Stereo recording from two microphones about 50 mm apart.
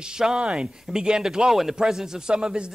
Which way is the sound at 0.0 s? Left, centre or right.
Centre.